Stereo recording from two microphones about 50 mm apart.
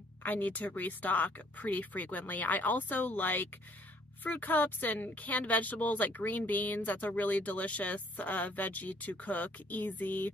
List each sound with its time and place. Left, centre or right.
0.2 s speech: left